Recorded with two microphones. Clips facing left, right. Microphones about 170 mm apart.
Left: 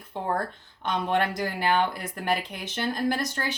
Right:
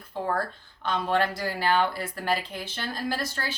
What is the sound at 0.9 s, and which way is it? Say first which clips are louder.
A woman's voice: even; 15° left (ahead or behind).